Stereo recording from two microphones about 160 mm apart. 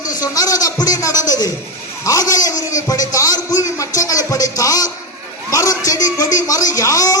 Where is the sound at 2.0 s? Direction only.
20° left (ahead or behind).